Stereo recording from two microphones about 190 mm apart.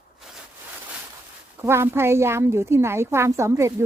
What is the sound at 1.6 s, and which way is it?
A woman's voice, 15° right (ahead or behind).